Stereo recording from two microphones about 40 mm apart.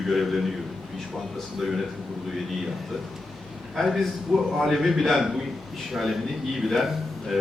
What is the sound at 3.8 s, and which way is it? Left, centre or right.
A man's voice, centre.